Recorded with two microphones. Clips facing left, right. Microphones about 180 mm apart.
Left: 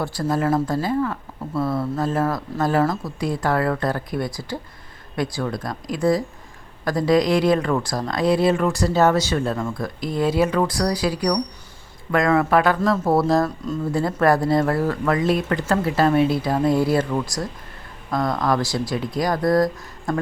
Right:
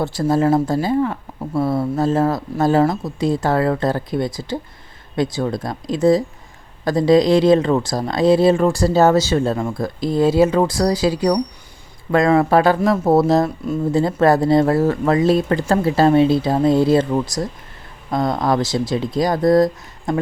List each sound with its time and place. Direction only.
0.0 s speech: 25° right (ahead or behind)